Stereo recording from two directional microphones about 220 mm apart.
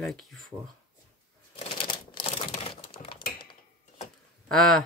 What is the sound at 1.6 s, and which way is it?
Shuffling cards, 25° left (ahead or behind).